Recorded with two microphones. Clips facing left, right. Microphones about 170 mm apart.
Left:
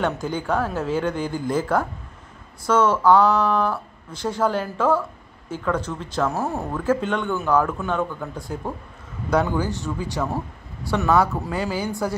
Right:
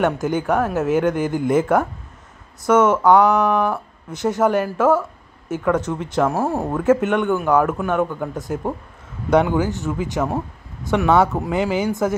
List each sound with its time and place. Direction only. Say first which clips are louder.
0.0 s speech: right 5 dB; 20° right (ahead or behind)
7.1 s speech: right 4 dB; 15° right (ahead or behind)